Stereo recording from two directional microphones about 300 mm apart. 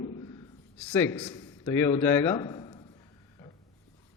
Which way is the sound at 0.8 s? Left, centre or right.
Centre.